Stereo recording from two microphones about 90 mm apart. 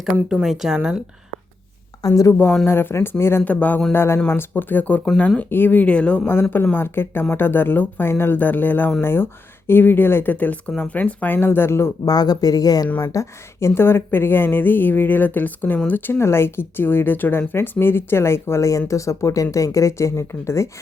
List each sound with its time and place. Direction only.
0.4 s speech: 5° right (ahead or behind)
2.0 s speech: 40° left (ahead or behind)
2.6 s speech: 25° left (ahead or behind)
3.4 s speech: 15° left (ahead or behind)
3.9 s speech: 25° left (ahead or behind)
5.0 s speech: 10° left (ahead or behind)
6.7 s speech: 25° left (ahead or behind)
12.0 s speech: 45° left (ahead or behind)
13.1 s speech: 35° left (ahead or behind)